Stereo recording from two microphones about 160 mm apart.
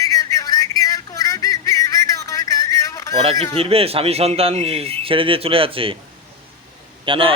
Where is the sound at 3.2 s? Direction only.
40° right (ahead or behind).